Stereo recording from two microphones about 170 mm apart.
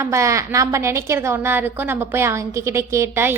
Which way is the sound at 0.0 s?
15° right (ahead or behind).